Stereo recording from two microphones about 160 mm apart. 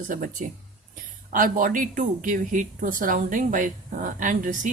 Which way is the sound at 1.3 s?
60° right (ahead or behind).